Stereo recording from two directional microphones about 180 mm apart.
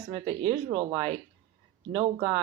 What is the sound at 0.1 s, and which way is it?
Speech, 35° right (ahead or behind).